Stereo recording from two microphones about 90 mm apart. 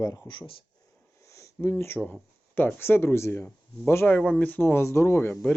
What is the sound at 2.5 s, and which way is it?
Speech, 25° left (ahead or behind).